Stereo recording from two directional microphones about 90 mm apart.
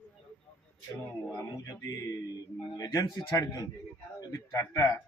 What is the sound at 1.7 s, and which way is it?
Speech, 35° left (ahead or behind).